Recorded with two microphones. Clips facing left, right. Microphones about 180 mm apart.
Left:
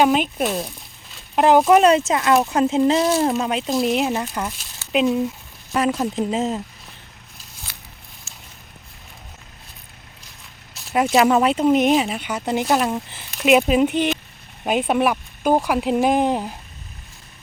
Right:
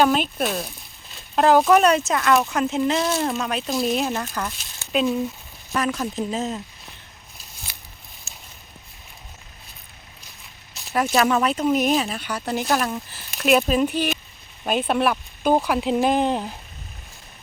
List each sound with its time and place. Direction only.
0.0 s speech: 15° left (ahead or behind)
5.7 s speech: 30° left (ahead or behind)
7.7 s scissors: 15° right (ahead or behind)
8.3 s a sound: 15° right (ahead or behind)
10.9 s speech: 20° left (ahead or behind)